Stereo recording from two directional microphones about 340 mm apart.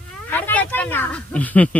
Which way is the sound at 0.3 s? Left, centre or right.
Centre.